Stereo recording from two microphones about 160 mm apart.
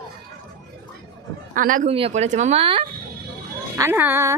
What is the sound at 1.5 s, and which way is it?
Speech, 55° right (ahead or behind).